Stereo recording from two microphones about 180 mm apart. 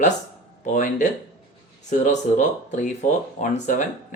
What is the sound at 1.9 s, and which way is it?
Speech, 40° left (ahead or behind).